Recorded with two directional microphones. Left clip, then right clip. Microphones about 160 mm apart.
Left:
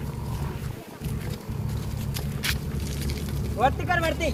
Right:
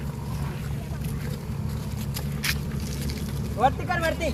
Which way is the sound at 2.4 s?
5° left (ahead or behind).